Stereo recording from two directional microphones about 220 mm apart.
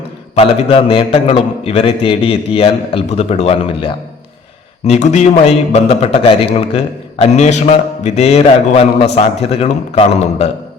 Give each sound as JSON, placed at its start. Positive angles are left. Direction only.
{"t": 0.3, "sound": "a man's voice", "side_deg": 25}